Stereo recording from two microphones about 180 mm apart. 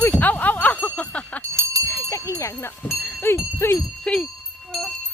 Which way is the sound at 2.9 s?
5° left (ahead or behind).